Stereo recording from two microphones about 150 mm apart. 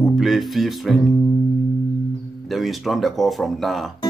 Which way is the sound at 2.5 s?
Centre (ahead or behind).